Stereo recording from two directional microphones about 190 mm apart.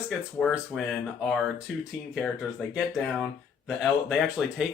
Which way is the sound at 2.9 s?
Centre (ahead or behind).